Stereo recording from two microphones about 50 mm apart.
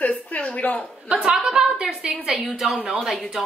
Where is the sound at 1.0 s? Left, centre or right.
Right.